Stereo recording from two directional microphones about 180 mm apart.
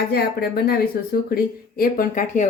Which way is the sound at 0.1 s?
60° left (ahead or behind).